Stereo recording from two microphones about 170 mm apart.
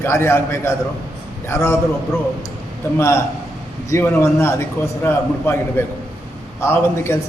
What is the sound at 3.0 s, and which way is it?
A man's voice, 15° left (ahead or behind).